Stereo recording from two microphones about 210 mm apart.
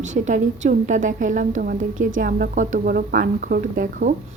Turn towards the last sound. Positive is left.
turn(degrees=-40)  # may be behind; listen again after turning